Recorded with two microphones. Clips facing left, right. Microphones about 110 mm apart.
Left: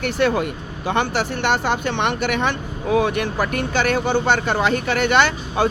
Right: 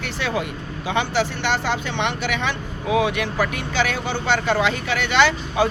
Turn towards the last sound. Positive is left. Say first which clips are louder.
# even
turn(degrees=50)  # may be behind; listen again after turning